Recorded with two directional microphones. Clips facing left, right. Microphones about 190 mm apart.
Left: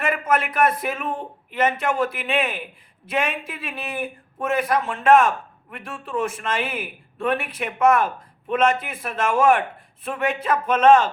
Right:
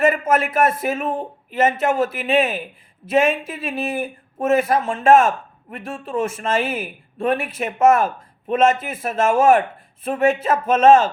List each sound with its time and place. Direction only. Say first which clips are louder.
0.0 s a man's voice: right 5 dB; 25° right (ahead or behind)